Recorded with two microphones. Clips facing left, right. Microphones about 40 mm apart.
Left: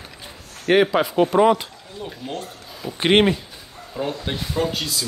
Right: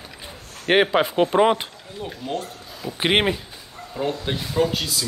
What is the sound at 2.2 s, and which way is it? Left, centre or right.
Speech, centre.